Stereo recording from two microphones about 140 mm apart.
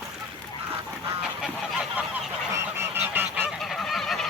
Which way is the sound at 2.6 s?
15° right (ahead or behind).